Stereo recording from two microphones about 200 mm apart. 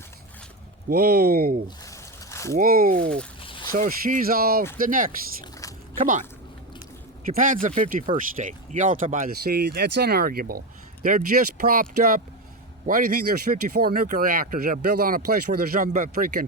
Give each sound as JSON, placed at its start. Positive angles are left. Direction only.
{"t": 0.9, "sound": "speech", "side_deg": -50}
{"t": 1.6, "sound": "a sound", "side_deg": 15}
{"t": 2.6, "sound": "speech", "side_deg": -45}
{"t": 3.4, "sound": "a sound", "side_deg": 25}
{"t": 3.7, "sound": "speech", "side_deg": -45}
{"t": 5.4, "sound": "a sound", "side_deg": 15}
{"t": 6.0, "sound": "speech", "side_deg": -40}
{"t": 7.3, "sound": "speech", "side_deg": -40}
{"t": 13.5, "sound": "speech", "side_deg": -50}